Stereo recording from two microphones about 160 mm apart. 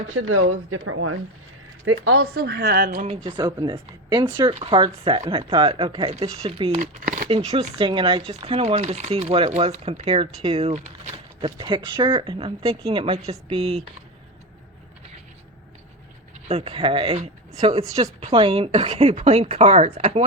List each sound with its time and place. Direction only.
2.0 s speech: 75° right (ahead or behind)
2.9 s speech: 40° right (ahead or behind)
3.2 s speech: 25° right (ahead or behind)
7.0 s a sound: 50° right (ahead or behind)
7.3 s speech: 35° right (ahead or behind)
11.4 s speech: 30° right (ahead or behind)
16.5 s speech: 40° right (ahead or behind)